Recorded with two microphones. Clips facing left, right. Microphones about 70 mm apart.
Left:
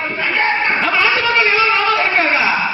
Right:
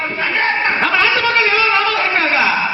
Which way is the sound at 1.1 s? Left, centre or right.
Left.